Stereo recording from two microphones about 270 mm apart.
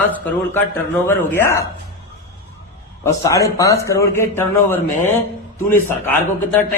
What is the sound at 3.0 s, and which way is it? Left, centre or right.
A man's voice, centre.